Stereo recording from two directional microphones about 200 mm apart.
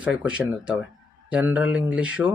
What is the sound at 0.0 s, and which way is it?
Speech, 5° right (ahead or behind).